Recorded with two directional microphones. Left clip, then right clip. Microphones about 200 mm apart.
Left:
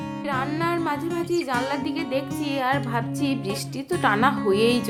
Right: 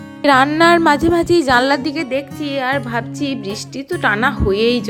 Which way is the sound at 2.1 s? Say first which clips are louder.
Right 6 dB; 20° right (ahead or behind).